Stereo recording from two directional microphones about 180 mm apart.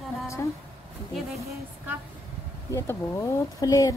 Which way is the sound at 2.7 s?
15° left (ahead or behind).